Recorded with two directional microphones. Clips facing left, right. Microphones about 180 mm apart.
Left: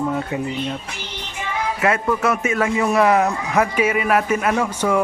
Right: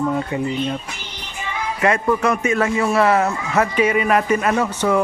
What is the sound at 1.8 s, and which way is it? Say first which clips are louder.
A man's voice: right 2 dB; 5° left (ahead or behind).